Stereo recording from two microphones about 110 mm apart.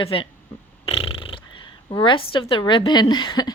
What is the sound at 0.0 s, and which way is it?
Speech, 55° left (ahead or behind).